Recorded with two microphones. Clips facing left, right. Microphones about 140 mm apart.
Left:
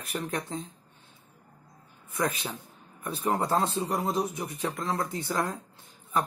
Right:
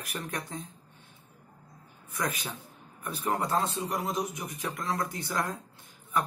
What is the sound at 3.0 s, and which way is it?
A man's voice, 25° left (ahead or behind).